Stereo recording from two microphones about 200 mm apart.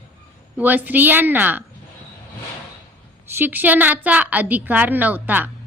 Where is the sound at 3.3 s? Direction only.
10° right (ahead or behind).